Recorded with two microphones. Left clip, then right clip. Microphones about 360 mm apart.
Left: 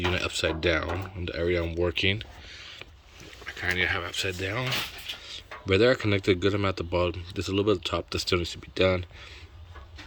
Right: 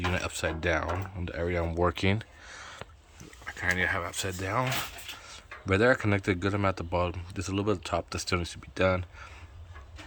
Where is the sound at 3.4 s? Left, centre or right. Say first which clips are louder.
Left 1 dB; centre.